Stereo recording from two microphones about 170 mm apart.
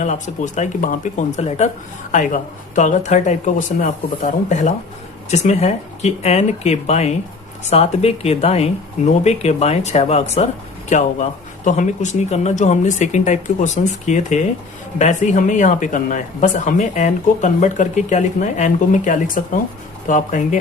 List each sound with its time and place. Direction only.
0.0 s speech: 45° left (ahead or behind)